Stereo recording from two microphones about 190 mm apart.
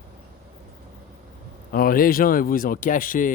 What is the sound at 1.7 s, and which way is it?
Speech, 50° left (ahead or behind).